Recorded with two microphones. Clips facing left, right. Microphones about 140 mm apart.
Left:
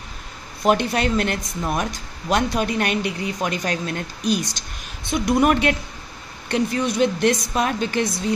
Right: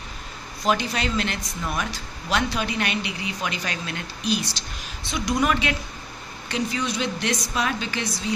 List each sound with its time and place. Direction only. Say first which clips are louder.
0.6 s speech: left 5 dB; 55° left (ahead or behind)